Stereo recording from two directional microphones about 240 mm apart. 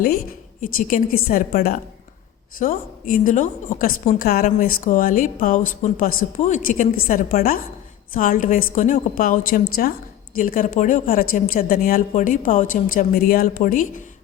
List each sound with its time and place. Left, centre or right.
0.6 s a woman's voice: left